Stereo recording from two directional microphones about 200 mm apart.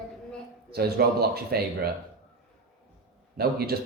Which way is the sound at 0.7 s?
50° right (ahead or behind).